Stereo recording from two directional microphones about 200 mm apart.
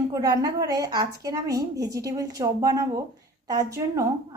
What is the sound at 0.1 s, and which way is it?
A woman's voice, 20° right (ahead or behind).